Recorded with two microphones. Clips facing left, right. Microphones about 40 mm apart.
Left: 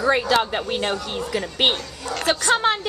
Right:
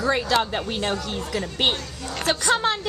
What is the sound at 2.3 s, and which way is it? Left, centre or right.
Speech, centre.